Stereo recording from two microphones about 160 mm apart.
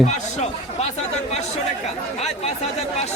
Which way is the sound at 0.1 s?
45° left (ahead or behind).